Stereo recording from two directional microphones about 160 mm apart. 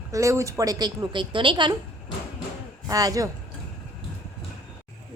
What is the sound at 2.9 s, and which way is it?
Speech, 20° right (ahead or behind).